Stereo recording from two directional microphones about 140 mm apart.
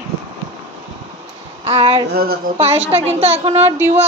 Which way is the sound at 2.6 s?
45° right (ahead or behind).